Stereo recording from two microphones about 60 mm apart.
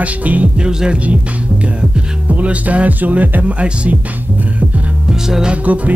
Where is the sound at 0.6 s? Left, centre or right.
Centre.